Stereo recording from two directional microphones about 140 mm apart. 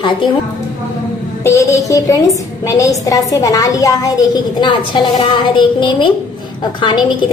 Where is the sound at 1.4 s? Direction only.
20° left (ahead or behind).